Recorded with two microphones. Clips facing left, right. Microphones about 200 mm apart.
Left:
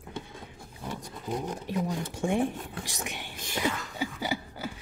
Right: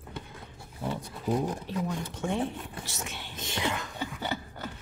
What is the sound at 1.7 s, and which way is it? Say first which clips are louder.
Speech: left 2 dB; 15° left (ahead or behind).